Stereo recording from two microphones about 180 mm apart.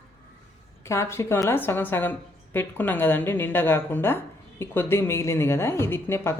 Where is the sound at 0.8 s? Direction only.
15° left (ahead or behind).